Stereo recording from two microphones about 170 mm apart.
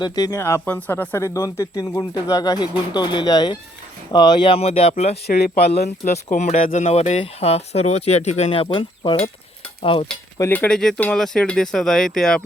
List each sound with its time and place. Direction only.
0.0 s speech: 20° left (ahead or behind); by 5.1 s 35° left (ahead or behind)
5.2 s speech: 70° left (ahead or behind)
6.3 s speech: 45° left (ahead or behind)
10.5 s speech: 5° left (ahead or behind)